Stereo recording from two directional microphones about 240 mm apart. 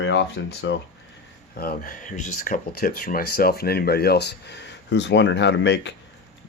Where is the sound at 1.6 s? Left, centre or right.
Left.